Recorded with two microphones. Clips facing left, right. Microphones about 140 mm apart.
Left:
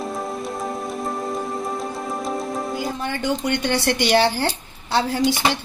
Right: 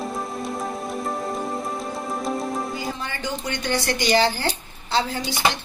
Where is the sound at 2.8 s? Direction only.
55° left (ahead or behind).